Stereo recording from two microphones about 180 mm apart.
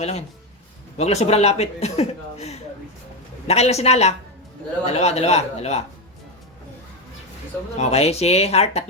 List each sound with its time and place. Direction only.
0.0 s speech: 35° left (ahead or behind)
7.8 s speech: 35° left (ahead or behind)